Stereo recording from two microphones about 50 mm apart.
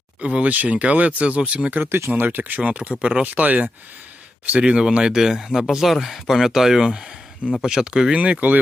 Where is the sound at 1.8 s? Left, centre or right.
Right.